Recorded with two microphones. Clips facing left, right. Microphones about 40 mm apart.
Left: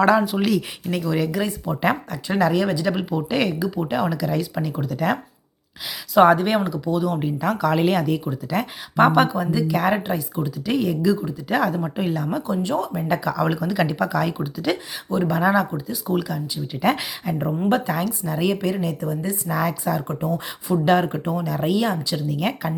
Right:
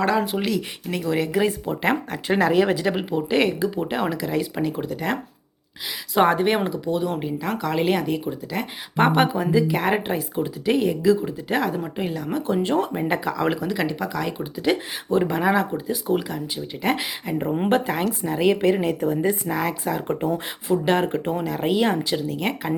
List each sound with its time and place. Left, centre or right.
0.0 s speech: centre
1.0 s speech: centre
2.0 s a woman's voice: right
2.3 s speech: right
7.2 s speech: centre; by 10.5 s right
10.7 s speech: centre
12.8 s speech: right
13.7 s speech: centre
14.5 s speech: centre
17.7 s a woman's voice: right
19.5 s speech: centre
21.2 s speech: right
22.3 s speech: centre